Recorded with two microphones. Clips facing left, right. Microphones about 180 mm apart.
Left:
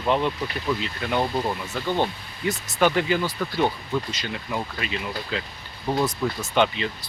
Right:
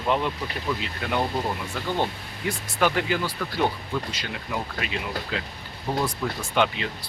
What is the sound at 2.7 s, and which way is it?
Speech, 5° right (ahead or behind).